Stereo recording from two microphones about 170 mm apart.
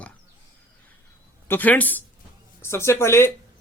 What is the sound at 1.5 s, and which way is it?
A man's voice, 10° left (ahead or behind).